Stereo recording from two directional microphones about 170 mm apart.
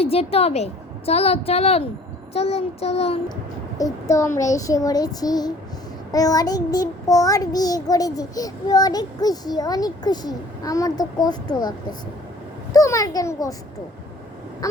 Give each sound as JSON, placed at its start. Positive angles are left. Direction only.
{"t": 0.0, "sound": "a woman's voice", "side_deg": 35}
{"t": 3.8, "sound": "child singing", "side_deg": 20}
{"t": 14.6, "sound": "child singing", "side_deg": 20}